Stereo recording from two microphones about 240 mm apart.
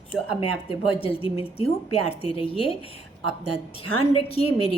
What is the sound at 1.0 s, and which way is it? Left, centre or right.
A woman's voice, left.